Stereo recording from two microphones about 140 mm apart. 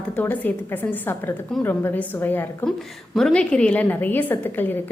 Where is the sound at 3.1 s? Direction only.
5° left (ahead or behind).